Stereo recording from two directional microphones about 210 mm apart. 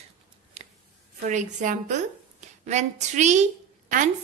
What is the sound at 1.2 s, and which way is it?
A woman's voice, 35° right (ahead or behind).